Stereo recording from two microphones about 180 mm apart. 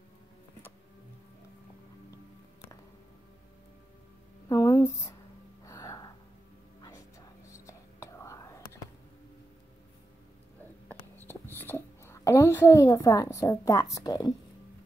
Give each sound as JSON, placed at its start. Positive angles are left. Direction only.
{"t": 4.5, "sound": "a sound", "side_deg": 20}
{"t": 5.7, "sound": "gasp", "side_deg": 20}
{"t": 6.8, "sound": "whispering", "side_deg": 15}
{"t": 11.5, "sound": "a child's voice", "side_deg": 15}